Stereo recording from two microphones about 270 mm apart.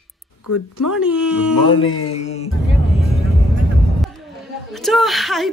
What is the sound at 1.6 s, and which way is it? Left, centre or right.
Speech, centre.